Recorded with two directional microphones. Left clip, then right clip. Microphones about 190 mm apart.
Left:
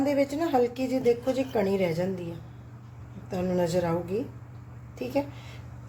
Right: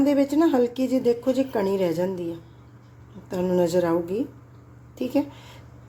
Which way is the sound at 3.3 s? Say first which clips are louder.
Right 5 dB; 35° right (ahead or behind).